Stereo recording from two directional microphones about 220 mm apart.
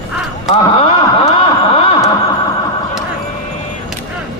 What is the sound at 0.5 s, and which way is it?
Wail, 25° left (ahead or behind).